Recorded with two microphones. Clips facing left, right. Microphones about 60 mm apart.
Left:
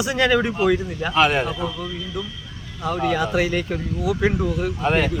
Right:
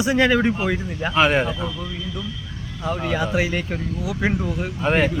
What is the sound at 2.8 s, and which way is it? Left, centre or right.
Speech, centre.